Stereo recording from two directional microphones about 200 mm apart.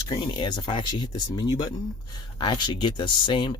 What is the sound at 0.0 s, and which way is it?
Speech, 20° left (ahead or behind).